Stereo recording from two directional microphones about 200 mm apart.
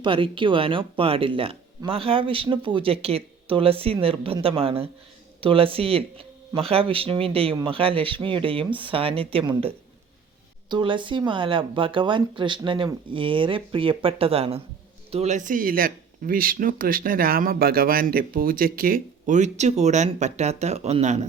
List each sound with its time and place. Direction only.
0.0 s speech: 25° right (ahead or behind)